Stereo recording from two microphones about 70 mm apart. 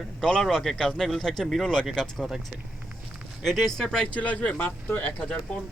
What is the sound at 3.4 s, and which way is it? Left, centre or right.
Speech, centre.